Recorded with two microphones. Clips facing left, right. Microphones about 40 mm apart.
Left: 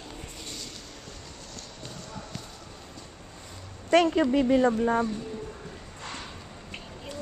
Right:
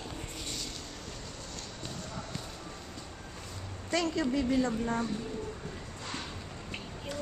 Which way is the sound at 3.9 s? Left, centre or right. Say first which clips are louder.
Left 9 dB; left.